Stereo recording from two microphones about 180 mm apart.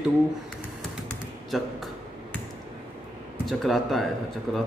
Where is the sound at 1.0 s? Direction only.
Centre (ahead or behind).